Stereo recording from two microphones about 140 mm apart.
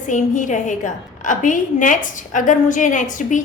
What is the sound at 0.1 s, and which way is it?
A woman's voice, 65° left (ahead or behind).